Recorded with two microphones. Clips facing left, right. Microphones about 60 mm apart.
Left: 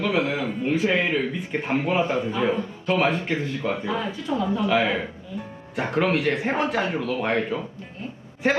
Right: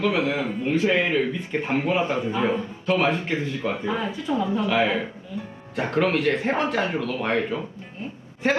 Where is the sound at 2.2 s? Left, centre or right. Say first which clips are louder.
Even; right.